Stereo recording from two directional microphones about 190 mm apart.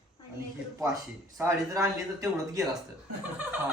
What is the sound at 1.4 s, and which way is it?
Speech, 15° right (ahead or behind).